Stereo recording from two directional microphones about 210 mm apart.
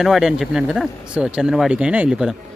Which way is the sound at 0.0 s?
Centre (ahead or behind).